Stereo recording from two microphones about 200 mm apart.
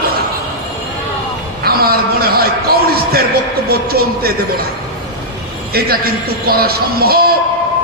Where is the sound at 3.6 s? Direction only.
50° right (ahead or behind).